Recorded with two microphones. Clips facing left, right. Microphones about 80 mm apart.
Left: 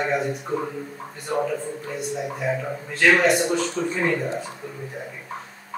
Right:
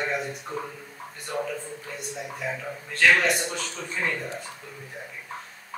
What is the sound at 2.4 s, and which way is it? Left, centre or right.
Speech, centre.